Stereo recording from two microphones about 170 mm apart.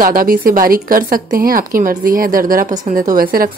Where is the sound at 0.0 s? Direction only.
60° right (ahead or behind).